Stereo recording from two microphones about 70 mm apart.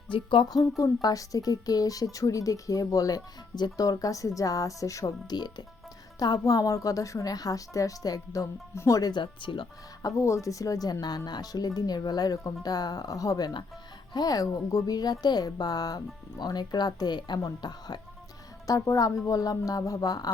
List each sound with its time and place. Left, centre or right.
0.8 s speech: left
3.8 s speech: left
5.3 s speech: left
6.1 s speech: left
6.4 s speech: left
10.2 s speech: left
11.3 s a woman's voice: left
14.1 s a woman's voice: left
16.4 s speech: left
18.7 s speech: left